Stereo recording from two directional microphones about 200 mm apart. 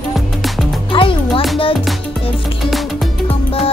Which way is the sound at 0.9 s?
25° left (ahead or behind).